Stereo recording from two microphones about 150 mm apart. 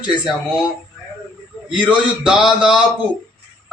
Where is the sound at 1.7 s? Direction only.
5° right (ahead or behind).